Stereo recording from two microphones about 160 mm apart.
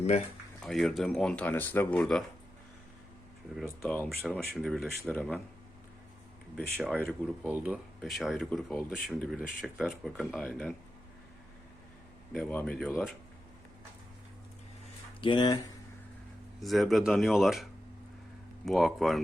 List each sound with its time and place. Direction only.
0.6 s speech: centre (ahead or behind)
3.8 s speech: 5° left (ahead or behind)
6.6 s speech: 5° left (ahead or behind)
7.4 s speech: 10° right (ahead or behind)
12.3 s speech: 5° left (ahead or behind)
15.2 s speech: 30° left (ahead or behind)
16.6 s speech: centre (ahead or behind)